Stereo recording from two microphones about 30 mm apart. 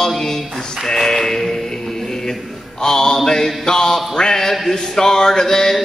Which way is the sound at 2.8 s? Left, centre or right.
Left.